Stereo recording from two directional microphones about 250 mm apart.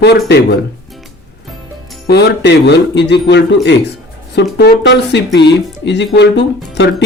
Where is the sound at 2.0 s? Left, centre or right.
Left.